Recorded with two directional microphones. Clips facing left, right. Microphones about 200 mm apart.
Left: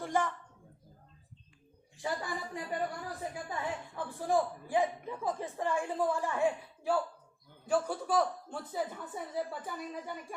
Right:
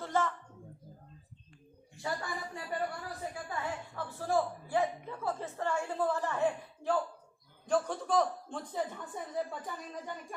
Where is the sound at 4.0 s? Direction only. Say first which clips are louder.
Left 1 dB; 15° left (ahead or behind).